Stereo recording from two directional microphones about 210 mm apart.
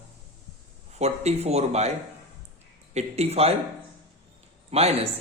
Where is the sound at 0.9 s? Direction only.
30° right (ahead or behind).